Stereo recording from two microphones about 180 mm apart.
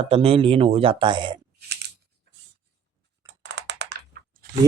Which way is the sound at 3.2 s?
75° right (ahead or behind).